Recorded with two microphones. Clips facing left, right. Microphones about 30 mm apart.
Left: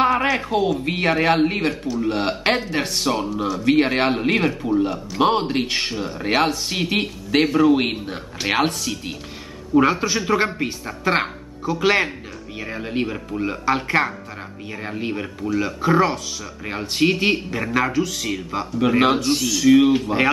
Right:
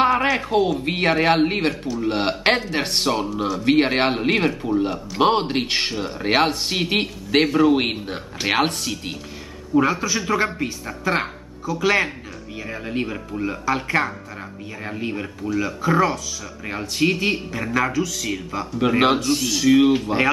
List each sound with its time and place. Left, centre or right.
0.0 s a man's voice: centre
9.8 s speech: centre
10.1 s speech: centre
18.7 s a man's voice: centre